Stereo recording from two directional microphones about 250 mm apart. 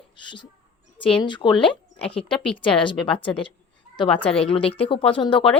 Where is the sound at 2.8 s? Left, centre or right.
Centre.